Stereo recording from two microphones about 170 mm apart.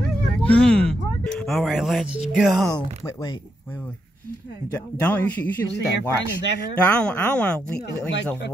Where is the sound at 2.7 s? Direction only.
20° left (ahead or behind).